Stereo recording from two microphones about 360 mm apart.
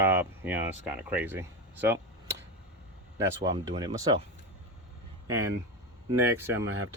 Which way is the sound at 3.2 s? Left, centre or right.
Centre.